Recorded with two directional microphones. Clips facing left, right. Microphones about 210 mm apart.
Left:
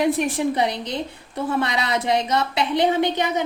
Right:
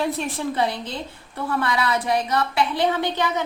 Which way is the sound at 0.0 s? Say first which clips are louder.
Left 5 dB; 15° left (ahead or behind).